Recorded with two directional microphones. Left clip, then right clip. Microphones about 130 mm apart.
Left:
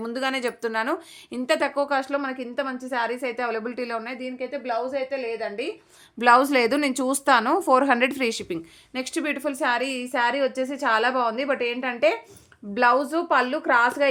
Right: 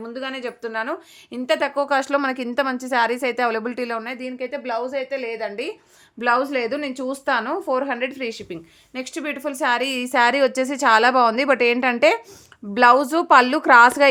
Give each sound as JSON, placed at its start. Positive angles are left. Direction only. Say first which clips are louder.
{"t": 0.0, "sound": "speech", "louder": "left 3 dB", "side_deg": 25}
{"t": 1.3, "sound": "a woman's voice", "louder": "right 2 dB", "side_deg": -5}
{"t": 1.7, "sound": "a woman's voice", "louder": "right 3 dB", "side_deg": -20}
{"t": 2.0, "sound": "a woman's voice", "louder": "right 5 dB", "side_deg": -40}
{"t": 6.1, "sound": "speech", "louder": "left 3 dB", "side_deg": 20}
{"t": 6.4, "sound": "a woman's voice", "louder": "left 2 dB", "side_deg": 35}
{"t": 8.9, "sound": "speech", "louder": "left 1 dB", "side_deg": 10}
{"t": 9.5, "sound": "a woman's voice", "louder": "right 4 dB", "side_deg": -15}
{"t": 9.8, "sound": "a woman's voice", "louder": "right 6 dB", "side_deg": -40}